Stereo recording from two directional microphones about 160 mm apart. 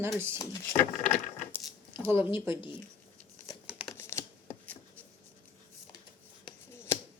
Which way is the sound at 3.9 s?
15° left (ahead or behind).